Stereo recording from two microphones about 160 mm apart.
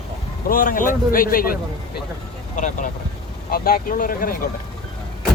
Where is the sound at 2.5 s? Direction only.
50° left (ahead or behind).